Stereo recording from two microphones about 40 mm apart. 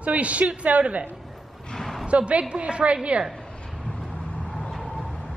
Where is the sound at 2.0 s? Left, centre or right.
Right.